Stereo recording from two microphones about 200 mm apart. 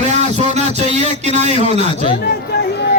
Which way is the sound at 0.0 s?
35° right (ahead or behind).